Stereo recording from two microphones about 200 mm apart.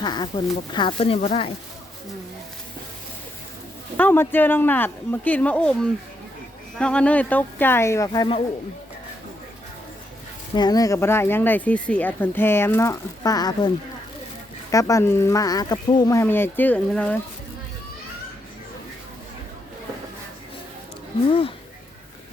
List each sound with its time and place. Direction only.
0.0 s speech: 20° left (ahead or behind)
3.9 s speech: 10° left (ahead or behind)
10.5 s speech: 20° left (ahead or behind)
14.7 s speech: 15° left (ahead or behind)
21.2 s speech: 25° left (ahead or behind)